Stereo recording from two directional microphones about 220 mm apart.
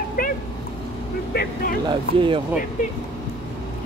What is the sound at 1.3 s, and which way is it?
Speech, 45° left (ahead or behind).